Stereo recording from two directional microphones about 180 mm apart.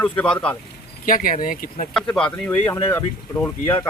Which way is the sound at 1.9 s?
5° left (ahead or behind).